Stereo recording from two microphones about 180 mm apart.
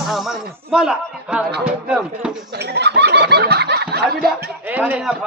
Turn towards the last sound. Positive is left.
turn(degrees=-5)  # may be behind; listen again after turning